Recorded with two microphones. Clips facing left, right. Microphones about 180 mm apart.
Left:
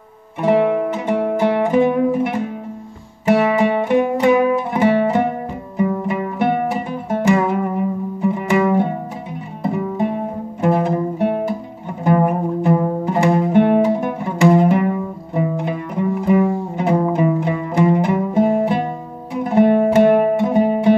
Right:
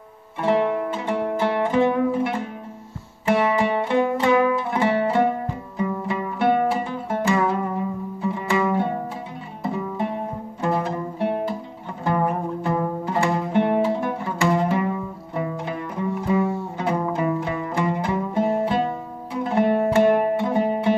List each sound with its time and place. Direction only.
0.4 s music: 15° left (ahead or behind)
3.5 s music: 20° left (ahead or behind)